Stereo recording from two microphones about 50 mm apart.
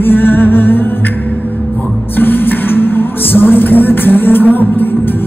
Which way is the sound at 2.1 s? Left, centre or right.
Left.